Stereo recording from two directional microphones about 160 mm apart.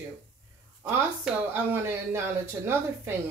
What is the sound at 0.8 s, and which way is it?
Speech, 15° right (ahead or behind).